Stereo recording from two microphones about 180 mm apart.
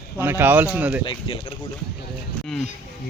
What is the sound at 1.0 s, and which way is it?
Speech, 30° left (ahead or behind).